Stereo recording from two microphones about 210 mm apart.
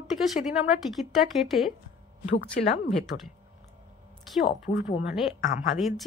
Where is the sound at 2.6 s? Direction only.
40° left (ahead or behind).